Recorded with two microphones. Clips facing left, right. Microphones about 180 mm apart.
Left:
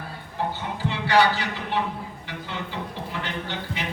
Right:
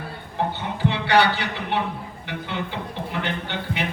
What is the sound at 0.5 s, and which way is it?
A man's voice, 65° right (ahead or behind).